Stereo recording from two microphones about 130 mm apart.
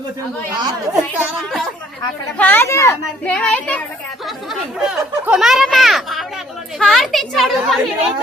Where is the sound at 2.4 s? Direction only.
15° left (ahead or behind).